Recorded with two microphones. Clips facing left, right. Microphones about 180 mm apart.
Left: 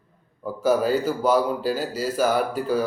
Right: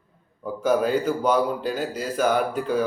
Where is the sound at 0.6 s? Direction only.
5° left (ahead or behind).